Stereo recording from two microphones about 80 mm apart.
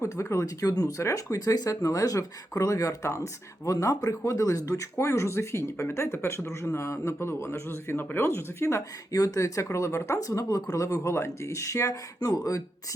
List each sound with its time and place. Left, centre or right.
0.0 s speech: left